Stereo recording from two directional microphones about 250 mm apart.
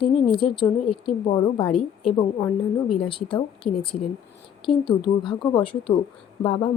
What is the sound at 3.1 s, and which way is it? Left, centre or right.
A woman's voice, centre.